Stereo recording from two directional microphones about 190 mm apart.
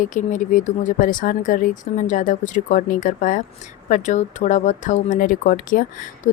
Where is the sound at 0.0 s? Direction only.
40° left (ahead or behind).